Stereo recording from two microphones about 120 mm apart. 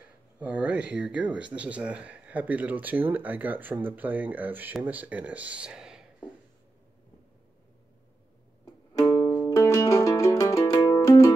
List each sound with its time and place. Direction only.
0.4 s speech: 10° right (ahead or behind)
8.6 s music: 30° left (ahead or behind)